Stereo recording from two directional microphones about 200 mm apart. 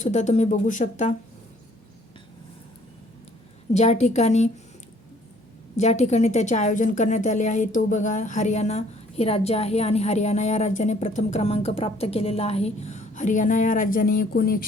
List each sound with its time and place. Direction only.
0.0 s a woman's voice: 35° left (ahead or behind)
3.7 s a woman's voice: 35° left (ahead or behind)
5.7 s a woman's voice: 35° left (ahead or behind)